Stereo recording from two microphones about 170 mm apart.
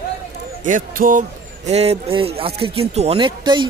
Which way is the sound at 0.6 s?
50° right (ahead or behind).